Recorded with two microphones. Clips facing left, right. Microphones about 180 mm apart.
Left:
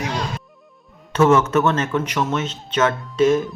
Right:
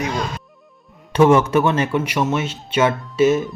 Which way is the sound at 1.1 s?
10° right (ahead or behind).